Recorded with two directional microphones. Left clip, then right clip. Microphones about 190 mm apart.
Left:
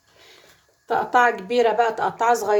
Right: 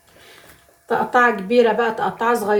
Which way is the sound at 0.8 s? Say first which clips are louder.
Right 2 dB; 50° left (ahead or behind).